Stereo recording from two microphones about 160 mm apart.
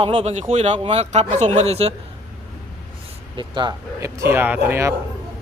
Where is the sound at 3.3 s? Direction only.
30° right (ahead or behind).